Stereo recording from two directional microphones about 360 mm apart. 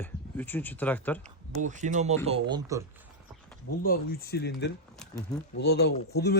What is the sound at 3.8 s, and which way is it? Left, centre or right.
A man's voice, left.